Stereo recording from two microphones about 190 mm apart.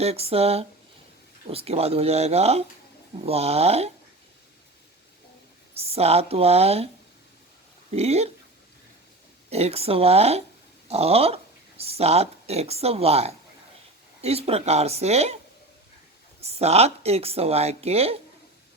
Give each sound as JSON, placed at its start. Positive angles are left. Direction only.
{"t": 0.0, "sound": "speech", "side_deg": -30}
{"t": 5.7, "sound": "speech", "side_deg": -30}
{"t": 7.9, "sound": "speech", "side_deg": -35}
{"t": 9.5, "sound": "speech", "side_deg": -35}
{"t": 16.4, "sound": "speech", "side_deg": -35}